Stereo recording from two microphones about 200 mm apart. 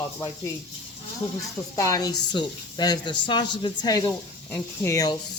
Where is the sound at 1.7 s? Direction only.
15° left (ahead or behind).